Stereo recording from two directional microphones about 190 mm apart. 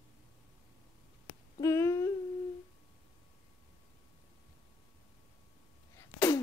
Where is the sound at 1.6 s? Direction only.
15° left (ahead or behind).